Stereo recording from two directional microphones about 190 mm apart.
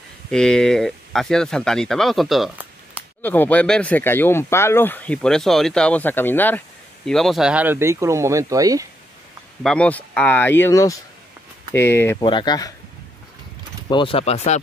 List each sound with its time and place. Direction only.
0.3 s speech: 5° left (ahead or behind)
3.2 s speech: 10° left (ahead or behind); by 8.8 s 20° right (ahead or behind)
9.6 s speech: 5° left (ahead or behind)
12.2 s speech: 25° left (ahead or behind)
13.8 s speech: 25° left (ahead or behind)